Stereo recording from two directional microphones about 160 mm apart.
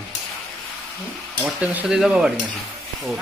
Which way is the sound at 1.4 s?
5° right (ahead or behind).